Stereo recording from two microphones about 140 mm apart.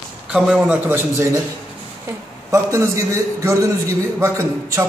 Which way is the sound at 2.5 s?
20° right (ahead or behind).